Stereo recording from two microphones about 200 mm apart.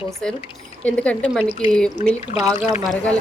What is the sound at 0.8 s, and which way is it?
Speech, 5° left (ahead or behind).